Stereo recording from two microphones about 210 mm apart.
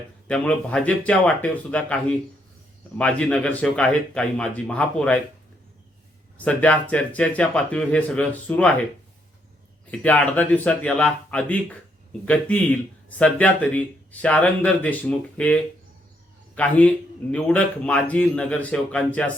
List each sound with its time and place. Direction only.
0.3 s a man's voice: 5° left (ahead or behind)
6.3 s speech: 5° left (ahead or behind)
9.8 s a man's voice: 5° left (ahead or behind)